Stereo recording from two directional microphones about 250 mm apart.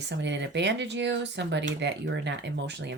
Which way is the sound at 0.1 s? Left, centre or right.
Right.